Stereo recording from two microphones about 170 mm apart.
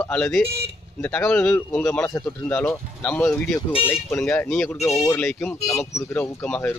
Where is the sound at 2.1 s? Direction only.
15° left (ahead or behind).